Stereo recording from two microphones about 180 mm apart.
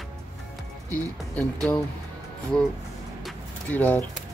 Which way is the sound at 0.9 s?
10° left (ahead or behind).